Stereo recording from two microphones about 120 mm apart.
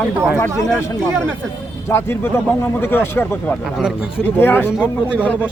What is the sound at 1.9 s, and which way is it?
Speech, 20° left (ahead or behind).